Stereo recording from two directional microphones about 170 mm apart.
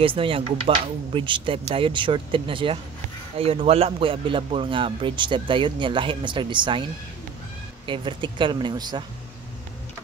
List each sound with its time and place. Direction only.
0.0 s speech: 30° right (ahead or behind)